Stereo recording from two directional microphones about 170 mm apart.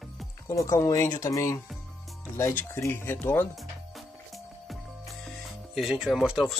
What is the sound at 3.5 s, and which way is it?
Music, centre (ahead or behind).